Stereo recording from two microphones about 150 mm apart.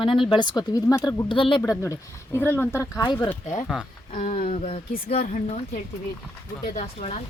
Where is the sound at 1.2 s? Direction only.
35° left (ahead or behind).